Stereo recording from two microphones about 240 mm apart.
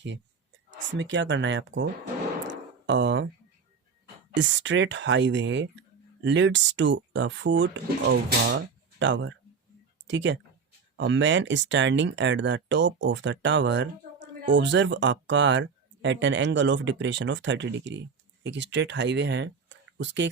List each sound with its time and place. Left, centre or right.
0.9 s speech: right
2.5 s a sound: right
4.3 s speech: right